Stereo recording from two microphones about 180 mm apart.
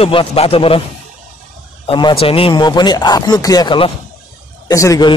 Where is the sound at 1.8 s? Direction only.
25° left (ahead or behind).